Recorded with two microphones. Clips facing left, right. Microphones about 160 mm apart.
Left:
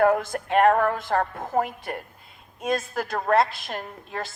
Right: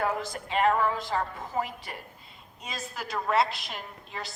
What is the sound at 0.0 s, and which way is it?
A woman's voice, 55° left (ahead or behind).